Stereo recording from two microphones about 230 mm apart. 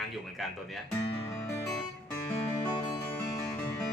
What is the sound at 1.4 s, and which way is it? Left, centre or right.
Music, centre.